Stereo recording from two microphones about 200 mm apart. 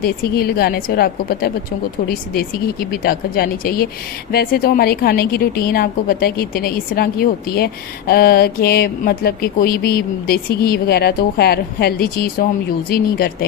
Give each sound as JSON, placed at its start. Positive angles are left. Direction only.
{"t": 0.0, "sound": "a woman's voice", "side_deg": 50}